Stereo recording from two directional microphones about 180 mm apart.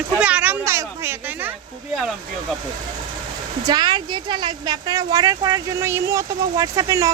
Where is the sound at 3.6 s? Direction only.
25° right (ahead or behind).